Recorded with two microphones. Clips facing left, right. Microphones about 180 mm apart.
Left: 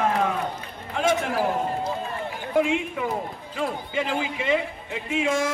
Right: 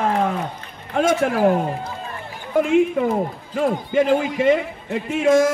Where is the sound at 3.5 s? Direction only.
50° right (ahead or behind).